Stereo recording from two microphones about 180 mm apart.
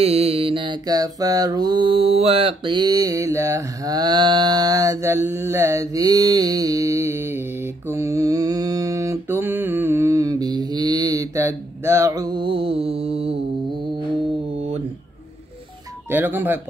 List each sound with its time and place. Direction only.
0.0 s mantra: 35° right (ahead or behind)
16.1 s speech: 10° right (ahead or behind)